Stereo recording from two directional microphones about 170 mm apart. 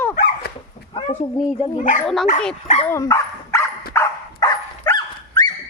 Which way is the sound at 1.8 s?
50° left (ahead or behind).